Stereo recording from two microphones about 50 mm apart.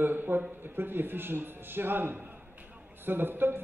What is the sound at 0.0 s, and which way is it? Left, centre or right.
A man's voice, right.